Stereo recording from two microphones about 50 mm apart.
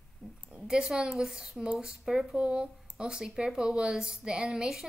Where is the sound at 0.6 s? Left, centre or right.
Centre.